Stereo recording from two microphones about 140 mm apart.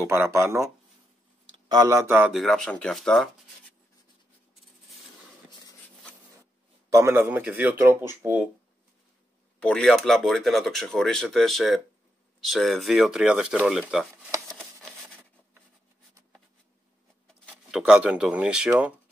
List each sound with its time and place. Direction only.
0.0 s speech: 15° right (ahead or behind)
1.7 s speech: 25° right (ahead or behind)
2.3 s speech: centre (ahead or behind)
6.9 s speech: 20° right (ahead or behind)
9.6 s speech: 5° left (ahead or behind)
14.5 s a sound: 5° left (ahead or behind)
17.6 s speech: 5° right (ahead or behind)